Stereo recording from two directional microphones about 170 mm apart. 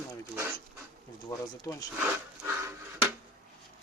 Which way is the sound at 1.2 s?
20° left (ahead or behind).